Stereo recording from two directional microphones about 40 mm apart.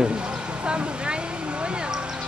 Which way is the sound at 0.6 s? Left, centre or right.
Right.